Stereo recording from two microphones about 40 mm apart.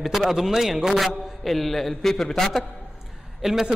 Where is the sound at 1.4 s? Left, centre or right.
Centre.